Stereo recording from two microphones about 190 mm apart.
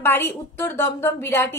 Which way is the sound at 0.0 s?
10° left (ahead or behind).